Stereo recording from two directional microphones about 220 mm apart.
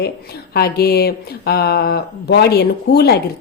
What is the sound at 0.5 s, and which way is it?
A woman's voice, 45° left (ahead or behind).